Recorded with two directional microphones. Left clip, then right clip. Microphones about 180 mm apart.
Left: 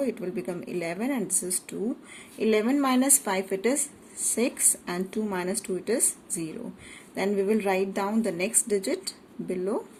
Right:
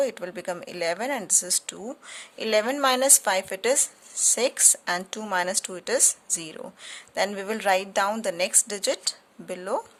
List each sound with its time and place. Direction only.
0.0 s a woman's voice: 55° right (ahead or behind)